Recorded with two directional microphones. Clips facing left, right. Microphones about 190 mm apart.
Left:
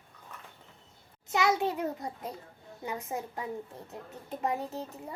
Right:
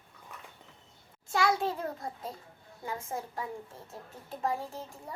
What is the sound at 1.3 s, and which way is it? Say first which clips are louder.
A child's voice: left 1 dB; 20° left (ahead or behind).